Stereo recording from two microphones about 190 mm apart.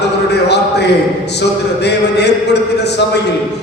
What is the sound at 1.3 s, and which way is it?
A man's voice, 65° left (ahead or behind).